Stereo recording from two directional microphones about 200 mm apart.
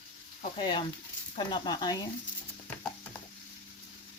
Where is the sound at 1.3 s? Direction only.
20° left (ahead or behind).